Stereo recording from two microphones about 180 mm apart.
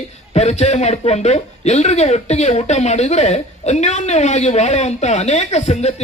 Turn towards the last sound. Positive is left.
turn(degrees=35)  # may be behind; listen again after turning